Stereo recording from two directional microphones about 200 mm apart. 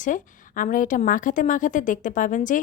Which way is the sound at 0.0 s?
40° left (ahead or behind).